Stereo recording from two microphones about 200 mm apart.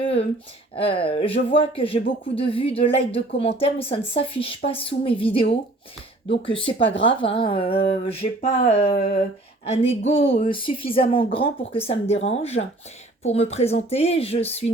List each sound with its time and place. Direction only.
0.0 s speech: 30° left (ahead or behind)
0.8 s a sound: 30° left (ahead or behind)
11.9 s speech: 30° left (ahead or behind)